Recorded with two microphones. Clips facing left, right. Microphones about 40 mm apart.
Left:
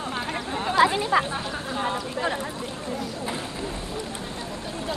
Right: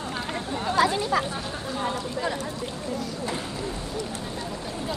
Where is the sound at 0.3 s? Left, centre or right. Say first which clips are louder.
Even; left.